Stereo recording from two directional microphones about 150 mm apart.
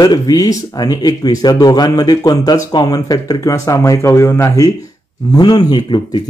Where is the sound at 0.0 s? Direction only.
25° left (ahead or behind).